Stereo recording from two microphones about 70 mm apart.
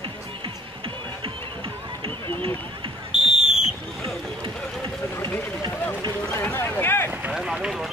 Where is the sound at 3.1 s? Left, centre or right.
Centre.